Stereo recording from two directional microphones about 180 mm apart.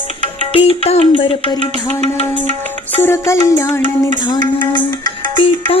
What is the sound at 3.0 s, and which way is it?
Music, 15° left (ahead or behind).